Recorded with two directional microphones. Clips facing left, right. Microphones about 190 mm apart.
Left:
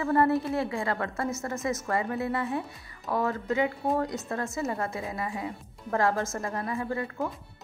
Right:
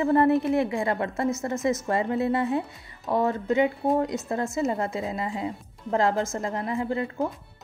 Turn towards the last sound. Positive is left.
turn(degrees=-20)  # may be behind; listen again after turning